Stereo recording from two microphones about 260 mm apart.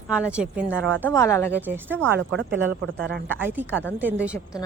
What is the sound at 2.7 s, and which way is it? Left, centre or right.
Speech, right.